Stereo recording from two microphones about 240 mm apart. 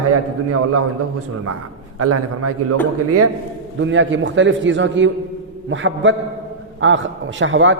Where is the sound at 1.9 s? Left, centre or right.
Right.